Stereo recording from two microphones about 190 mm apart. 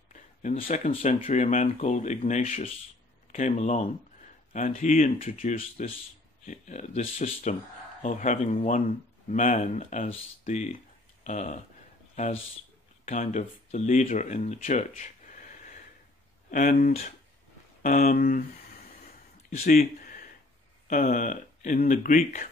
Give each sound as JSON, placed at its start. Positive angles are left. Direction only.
{"t": 0.1, "sound": "speech", "side_deg": 40}
{"t": 13.0, "sound": "speech", "side_deg": 40}
{"t": 19.6, "sound": "speech", "side_deg": 50}